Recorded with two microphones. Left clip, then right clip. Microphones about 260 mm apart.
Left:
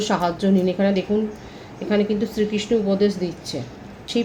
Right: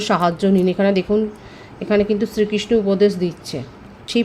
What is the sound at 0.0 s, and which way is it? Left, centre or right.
Speech, right.